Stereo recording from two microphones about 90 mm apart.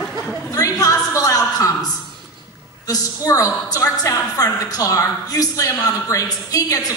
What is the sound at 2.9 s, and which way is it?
A woman's voice, 40° left (ahead or behind).